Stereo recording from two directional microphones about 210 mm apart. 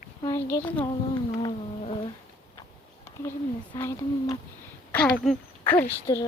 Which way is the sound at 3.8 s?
15° left (ahead or behind).